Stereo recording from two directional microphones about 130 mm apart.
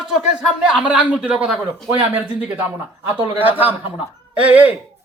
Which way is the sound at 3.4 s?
15° right (ahead or behind).